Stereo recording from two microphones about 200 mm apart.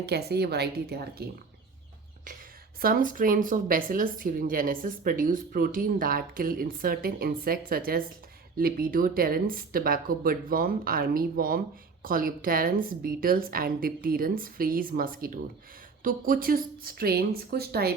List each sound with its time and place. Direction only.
0.0 s speech: 55° right (ahead or behind)
2.8 s speech: 45° right (ahead or behind)